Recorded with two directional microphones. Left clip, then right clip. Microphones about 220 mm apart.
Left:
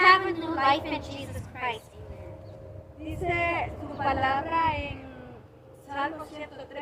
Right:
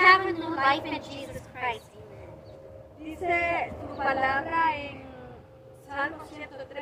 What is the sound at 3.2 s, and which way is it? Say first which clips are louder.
A woman's voice: right 1 dB; 15° left (ahead or behind).